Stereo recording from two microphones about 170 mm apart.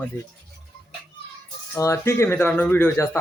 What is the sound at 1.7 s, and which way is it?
Speech, 15° left (ahead or behind).